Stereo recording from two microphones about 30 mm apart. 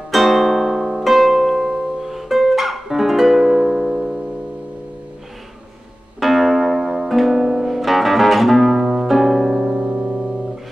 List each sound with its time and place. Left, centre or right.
0.1 s music: centre
3.3 s music: centre
6.1 s music: centre
7.3 s music: centre
7.8 s music: centre
9.8 s music: right
10.0 s music: centre